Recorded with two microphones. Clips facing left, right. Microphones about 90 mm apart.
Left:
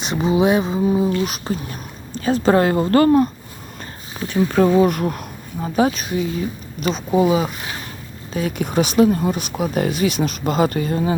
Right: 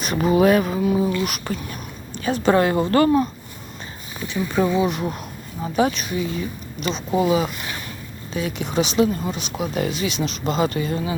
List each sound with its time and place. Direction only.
0.0 s speech: 25° left (ahead or behind)
4.4 s speech: 50° left (ahead or behind)
5.6 s speech: 35° left (ahead or behind)
7.2 s speech: 30° left (ahead or behind)
8.3 s speech: 45° left (ahead or behind)